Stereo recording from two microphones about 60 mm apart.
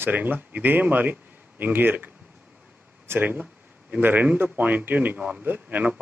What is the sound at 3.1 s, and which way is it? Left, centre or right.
A man's voice, right.